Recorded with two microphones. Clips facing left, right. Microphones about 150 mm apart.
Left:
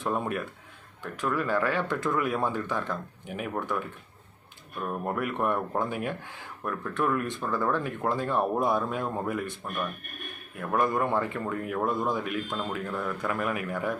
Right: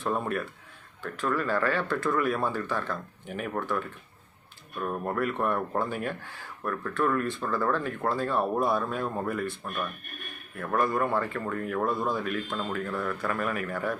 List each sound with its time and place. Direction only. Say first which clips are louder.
0.0 s speech: even; 15° left (ahead or behind)
5.0 s speech: even; 15° left (ahead or behind)
10.6 s speech: even; 15° left (ahead or behind)